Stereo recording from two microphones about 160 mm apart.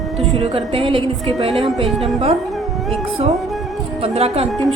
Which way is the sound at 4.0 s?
40° right (ahead or behind).